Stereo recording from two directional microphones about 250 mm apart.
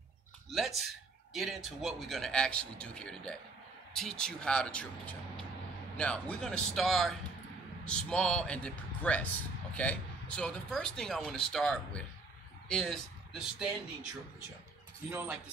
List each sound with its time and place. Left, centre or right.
0.5 s speech: centre
15.0 s speech: centre